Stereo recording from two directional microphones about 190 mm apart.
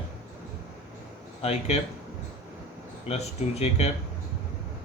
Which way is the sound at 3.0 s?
35° left (ahead or behind).